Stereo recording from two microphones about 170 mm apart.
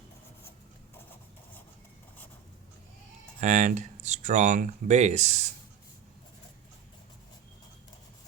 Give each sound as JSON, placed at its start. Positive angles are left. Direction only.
{"t": 3.4, "sound": "speech", "side_deg": -45}